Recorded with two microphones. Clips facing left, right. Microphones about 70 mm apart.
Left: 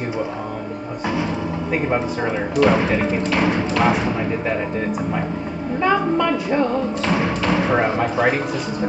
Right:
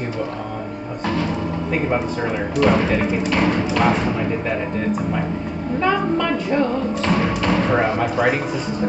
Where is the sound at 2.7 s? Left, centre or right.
Centre.